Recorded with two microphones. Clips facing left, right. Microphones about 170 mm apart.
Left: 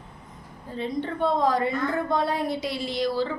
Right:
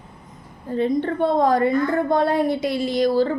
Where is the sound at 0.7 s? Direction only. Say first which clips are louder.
Right 8 dB; 55° right (ahead or behind).